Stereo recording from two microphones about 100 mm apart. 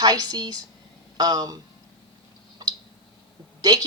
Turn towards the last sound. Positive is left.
turn(degrees=-45)  # may be behind; listen again after turning